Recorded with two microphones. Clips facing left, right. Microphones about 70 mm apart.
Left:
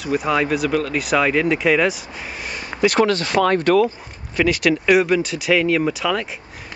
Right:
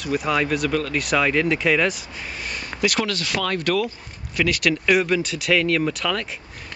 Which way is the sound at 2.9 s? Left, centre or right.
Left.